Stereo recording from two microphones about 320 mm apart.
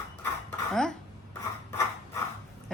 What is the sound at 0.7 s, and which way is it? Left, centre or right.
Speech, centre.